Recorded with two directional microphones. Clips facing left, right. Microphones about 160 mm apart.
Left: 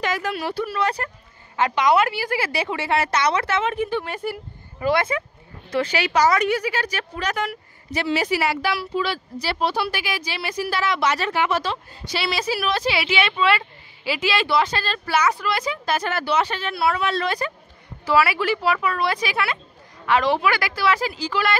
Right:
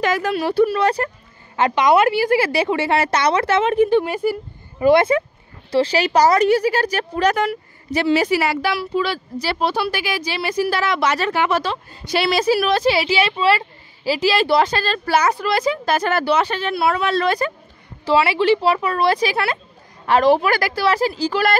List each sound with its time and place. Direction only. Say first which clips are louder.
0.0 s speech: right 5 dB; 45° right (ahead or behind)
0.3 s a woman's voice: right 9 dB; 30° right (ahead or behind)
1.6 s speech: right 4 dB; 20° right (ahead or behind)
4.0 s speech: right 8 dB; 5° right (ahead or behind)
4.7 s a woman's voice: right 8 dB; 25° right (ahead or behind)
9.8 s a woman's voice: right 3 dB; 40° right (ahead or behind)
10.8 s a woman's voice: right 3 dB; 50° right (ahead or behind)
16.6 s speech: right 3 dB; 25° right (ahead or behind)
17.2 s speech: right 6 dB; 50° right (ahead or behind)
18.0 s a woman's voice: right 4 dB; 25° right (ahead or behind)